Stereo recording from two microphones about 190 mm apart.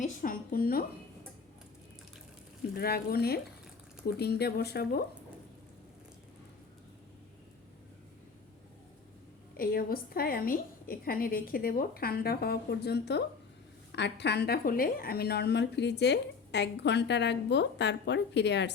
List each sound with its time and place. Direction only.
0.0 s a sound: 45° left (ahead or behind)
2.7 s a woman's voice: 55° left (ahead or behind)
9.6 s a woman's voice: 50° left (ahead or behind)